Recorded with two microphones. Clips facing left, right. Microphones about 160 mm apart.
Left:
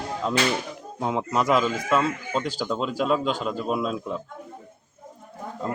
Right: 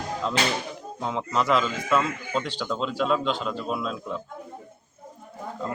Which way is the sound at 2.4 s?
40° left (ahead or behind).